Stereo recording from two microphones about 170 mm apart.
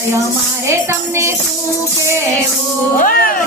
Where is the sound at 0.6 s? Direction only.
15° right (ahead or behind).